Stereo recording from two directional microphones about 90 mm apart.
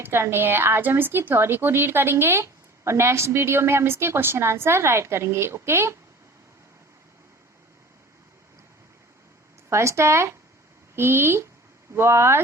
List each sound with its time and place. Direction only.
0.0 s a woman's voice: 25° right (ahead or behind)
9.6 s a woman's voice: 30° right (ahead or behind)